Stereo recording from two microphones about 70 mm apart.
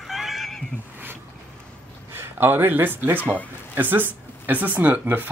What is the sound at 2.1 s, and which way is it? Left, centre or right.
A man's voice, right.